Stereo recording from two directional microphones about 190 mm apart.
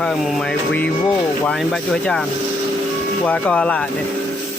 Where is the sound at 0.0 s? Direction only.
Centre (ahead or behind).